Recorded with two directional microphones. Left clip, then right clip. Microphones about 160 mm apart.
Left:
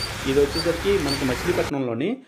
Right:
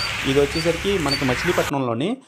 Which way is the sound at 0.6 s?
40° right (ahead or behind).